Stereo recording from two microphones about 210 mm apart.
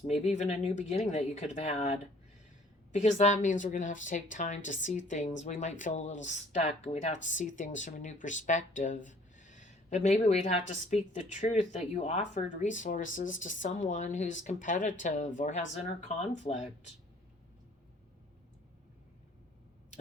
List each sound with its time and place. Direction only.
0.1 s speech: 35° left (ahead or behind)